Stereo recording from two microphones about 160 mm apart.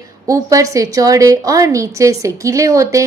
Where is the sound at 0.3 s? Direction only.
20° right (ahead or behind).